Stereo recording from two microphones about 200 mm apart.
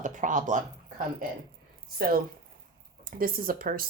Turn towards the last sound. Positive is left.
turn(degrees=-45)  # may be behind; listen again after turning